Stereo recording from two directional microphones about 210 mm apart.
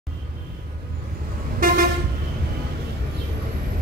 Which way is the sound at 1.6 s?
40° right (ahead or behind).